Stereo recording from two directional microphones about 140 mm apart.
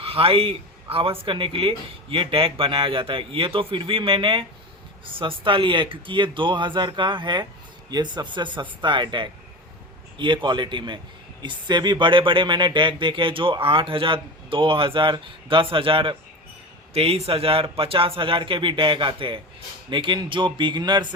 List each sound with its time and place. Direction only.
0.0 s speech: 40° right (ahead or behind)